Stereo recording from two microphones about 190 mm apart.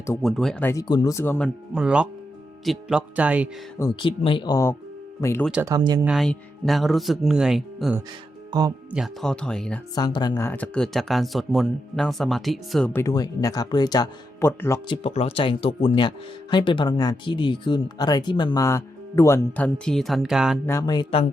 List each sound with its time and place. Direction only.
0.2 s speech: centre (ahead or behind)
0.7 s speech: 20° left (ahead or behind)
1.7 s speech: 5° right (ahead or behind)
4.0 s speech: 25° left (ahead or behind)
5.6 s speech: 20° right (ahead or behind)
6.1 s speech: centre (ahead or behind)
8.4 s speech: 20° right (ahead or behind)
8.9 s speech: centre (ahead or behind)
9.9 s speech: 20° left (ahead or behind)
14.8 s speech: 30° left (ahead or behind); by 20.6 s 5° right (ahead or behind)
20.7 s speech: 20° left (ahead or behind)